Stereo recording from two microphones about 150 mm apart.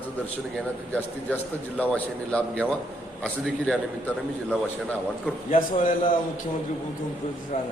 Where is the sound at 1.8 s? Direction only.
10° left (ahead or behind).